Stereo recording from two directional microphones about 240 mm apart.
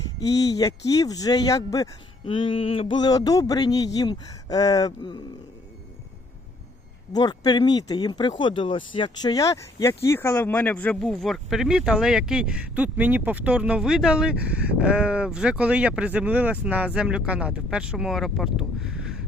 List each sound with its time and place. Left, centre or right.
0.2 s speech: centre
7.1 s speech: centre